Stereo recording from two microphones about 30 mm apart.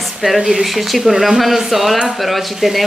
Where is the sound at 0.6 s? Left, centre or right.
Centre.